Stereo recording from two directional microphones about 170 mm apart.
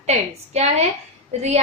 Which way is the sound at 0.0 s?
40° right (ahead or behind).